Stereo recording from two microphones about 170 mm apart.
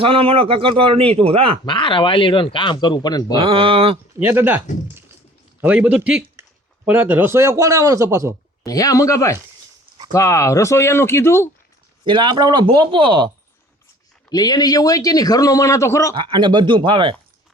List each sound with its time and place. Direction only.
0.0 s a man's voice: 30° right (ahead or behind)
1.6 s a man's voice: 30° left (ahead or behind)
3.3 s a man's voice: 30° right (ahead or behind)
4.2 s speech: 10° right (ahead or behind)
8.6 s a man's voice: 20° left (ahead or behind)
12.0 s speech: 30° right (ahead or behind)
14.3 s a man's voice: 25° left (ahead or behind)
16.1 s speech: 25° right (ahead or behind)